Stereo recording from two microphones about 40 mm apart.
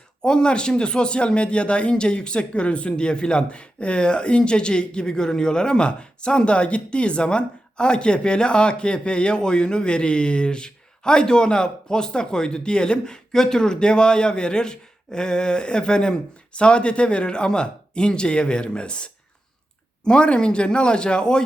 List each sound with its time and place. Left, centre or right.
0.2 s speech: left